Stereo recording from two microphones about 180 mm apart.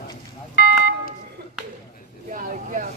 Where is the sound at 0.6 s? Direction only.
65° left (ahead or behind).